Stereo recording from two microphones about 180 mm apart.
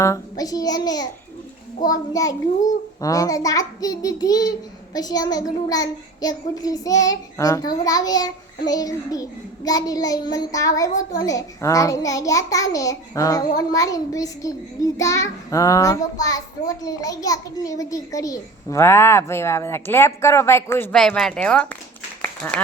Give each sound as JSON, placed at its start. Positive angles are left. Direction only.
{"t": 0.0, "sound": "a child's voice", "side_deg": 20}